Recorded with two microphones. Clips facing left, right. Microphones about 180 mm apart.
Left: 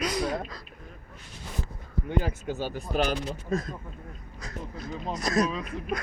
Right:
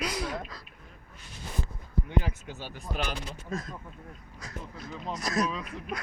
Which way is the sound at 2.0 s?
40° left (ahead or behind).